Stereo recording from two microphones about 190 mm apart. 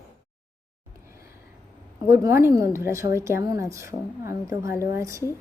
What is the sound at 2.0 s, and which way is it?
A woman's voice, 15° right (ahead or behind).